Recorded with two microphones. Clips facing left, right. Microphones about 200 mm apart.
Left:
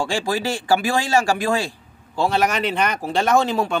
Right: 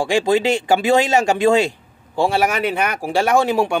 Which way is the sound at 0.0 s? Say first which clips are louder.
Right 6 dB; 20° right (ahead or behind).